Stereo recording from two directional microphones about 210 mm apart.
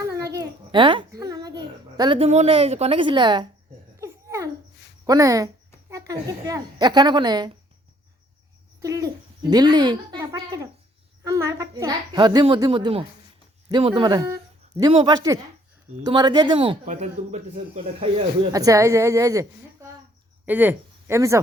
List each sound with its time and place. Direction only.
0.1 s a sound: 15° right (ahead or behind)
5.0 s a woman's voice: 15° right (ahead or behind)
8.8 s a child's voice: 15° right (ahead or behind)
16.8 s speech: 35° right (ahead or behind)
18.5 s a woman's voice: 15° right (ahead or behind)